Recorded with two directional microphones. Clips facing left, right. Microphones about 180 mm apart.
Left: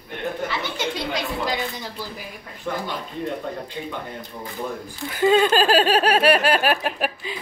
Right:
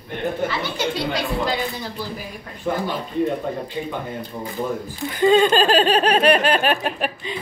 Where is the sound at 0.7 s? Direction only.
20° left (ahead or behind).